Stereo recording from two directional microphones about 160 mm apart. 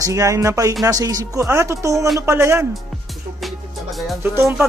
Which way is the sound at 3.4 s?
Centre (ahead or behind).